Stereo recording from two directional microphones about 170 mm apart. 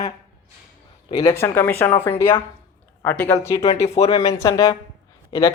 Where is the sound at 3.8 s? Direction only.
40° left (ahead or behind).